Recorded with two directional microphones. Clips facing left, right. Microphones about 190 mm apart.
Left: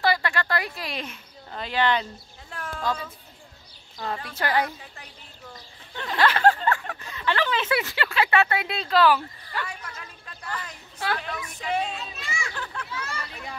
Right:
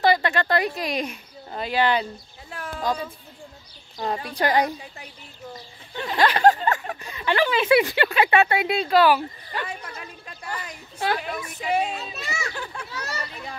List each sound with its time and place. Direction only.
0.0 s speech: 20° right (ahead or behind)
2.5 s a sound: 5° right (ahead or behind)
2.9 s speech: 15° right (ahead or behind)
5.9 s a sound: 10° right (ahead or behind)
8.5 s speech: 15° right (ahead or behind)
9.9 s a sound: 15° right (ahead or behind)
11.1 s speech: 10° right (ahead or behind)
11.9 s a child's voice: 40° right (ahead or behind)
13.2 s a child's voice: centre (ahead or behind)